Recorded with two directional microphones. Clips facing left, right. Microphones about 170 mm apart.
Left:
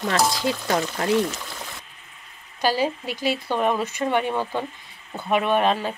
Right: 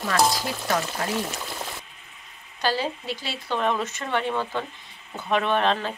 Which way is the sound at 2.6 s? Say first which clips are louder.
Left 4 dB; 15° left (ahead or behind).